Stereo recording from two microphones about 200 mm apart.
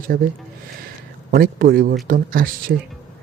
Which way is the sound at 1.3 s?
45° right (ahead or behind).